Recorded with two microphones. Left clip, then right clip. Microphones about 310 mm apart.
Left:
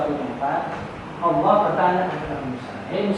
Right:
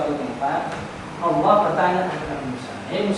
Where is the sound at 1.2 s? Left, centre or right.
Centre.